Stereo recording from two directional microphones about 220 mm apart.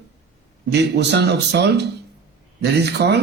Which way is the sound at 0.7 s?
50° right (ahead or behind).